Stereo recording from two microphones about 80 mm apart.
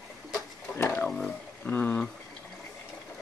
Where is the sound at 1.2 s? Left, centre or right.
Left.